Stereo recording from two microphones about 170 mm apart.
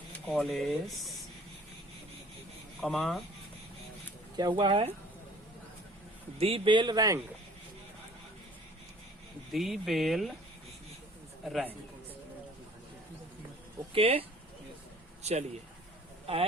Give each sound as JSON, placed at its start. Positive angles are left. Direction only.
{"t": 0.3, "sound": "speech", "side_deg": 0}
{"t": 2.8, "sound": "speech", "side_deg": 0}
{"t": 4.4, "sound": "a man's voice", "side_deg": -25}
{"t": 6.4, "sound": "a man's voice", "side_deg": -30}
{"t": 9.5, "sound": "speech", "side_deg": 0}
{"t": 11.4, "sound": "speech", "side_deg": 0}
{"t": 13.9, "sound": "speech", "side_deg": -35}